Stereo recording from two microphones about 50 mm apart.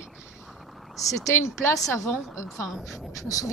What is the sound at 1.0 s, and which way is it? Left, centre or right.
A woman's voice, left.